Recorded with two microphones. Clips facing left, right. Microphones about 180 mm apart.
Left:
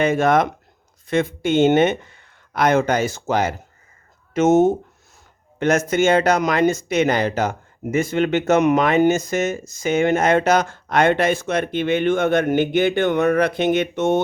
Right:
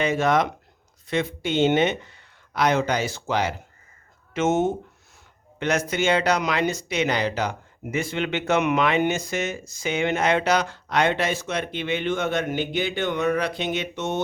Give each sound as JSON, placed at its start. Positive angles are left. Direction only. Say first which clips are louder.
{"t": 0.0, "sound": "speech", "louder": "left 4 dB", "side_deg": 50}